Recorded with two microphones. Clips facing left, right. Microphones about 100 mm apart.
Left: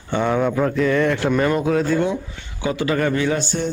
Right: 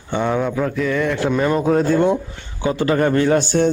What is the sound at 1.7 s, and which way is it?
Speech, 35° right (ahead or behind).